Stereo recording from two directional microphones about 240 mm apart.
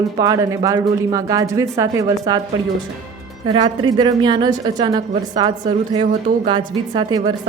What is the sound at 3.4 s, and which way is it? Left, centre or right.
A woman's voice, centre.